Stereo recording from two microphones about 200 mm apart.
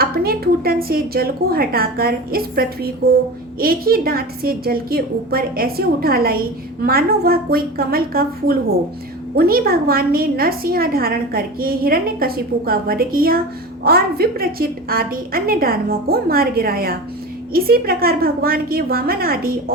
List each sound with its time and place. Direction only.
0.0 s a woman's voice: 50° right (ahead or behind)